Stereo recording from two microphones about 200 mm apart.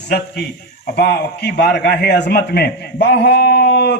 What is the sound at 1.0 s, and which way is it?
A man's voice, 55° left (ahead or behind).